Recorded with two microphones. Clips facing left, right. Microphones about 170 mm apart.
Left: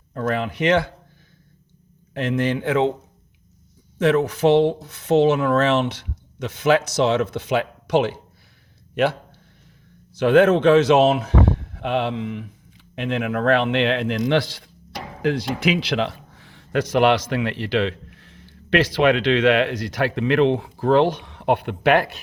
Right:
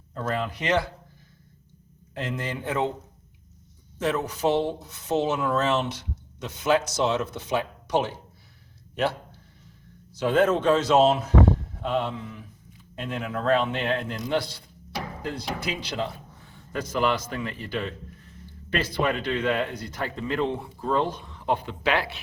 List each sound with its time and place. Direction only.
0.1 s speech: 65° left (ahead or behind)
2.1 s a man's voice: 70° left (ahead or behind); by 2.9 s 90° left
3.9 s speech: 60° left (ahead or behind); by 8.1 s 80° left
10.2 s a man's voice: 75° left (ahead or behind); by 22.2 s 50° left (ahead or behind)